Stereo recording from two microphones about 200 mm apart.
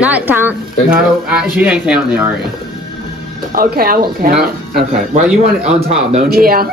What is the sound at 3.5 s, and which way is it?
Speech, 45° right (ahead or behind).